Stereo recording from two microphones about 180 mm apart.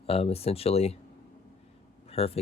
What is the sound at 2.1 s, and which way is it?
Speech, 35° left (ahead or behind).